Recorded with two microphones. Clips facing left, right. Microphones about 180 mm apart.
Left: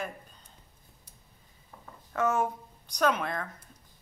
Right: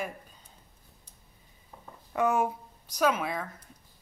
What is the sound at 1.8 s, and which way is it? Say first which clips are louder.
Speech: right 1 dB; 15° right (ahead or behind).